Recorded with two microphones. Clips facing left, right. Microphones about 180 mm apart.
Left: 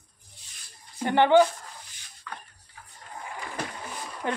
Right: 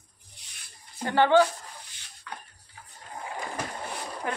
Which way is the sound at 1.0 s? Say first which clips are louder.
Left 2 dB; 20° left (ahead or behind).